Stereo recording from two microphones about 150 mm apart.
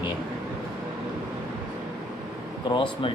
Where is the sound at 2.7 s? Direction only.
30° left (ahead or behind).